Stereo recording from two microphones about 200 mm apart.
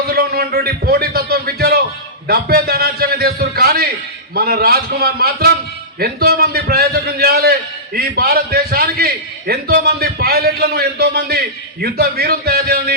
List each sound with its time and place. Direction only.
0.1 s a man's voice: 50° right (ahead or behind)